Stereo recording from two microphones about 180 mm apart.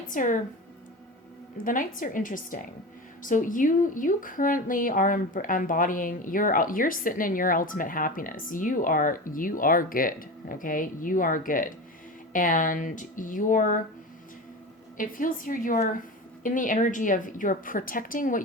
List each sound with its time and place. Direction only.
0.1 s a woman's voice: 45° left (ahead or behind)
1.6 s a woman's voice: 50° left (ahead or behind)
14.9 s a woman's voice: 50° left (ahead or behind)